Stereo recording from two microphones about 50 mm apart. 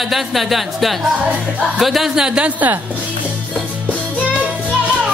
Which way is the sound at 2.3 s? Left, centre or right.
Right.